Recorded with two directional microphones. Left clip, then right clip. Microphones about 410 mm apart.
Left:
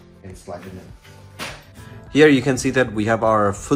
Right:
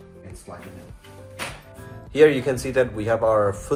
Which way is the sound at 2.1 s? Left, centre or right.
Centre.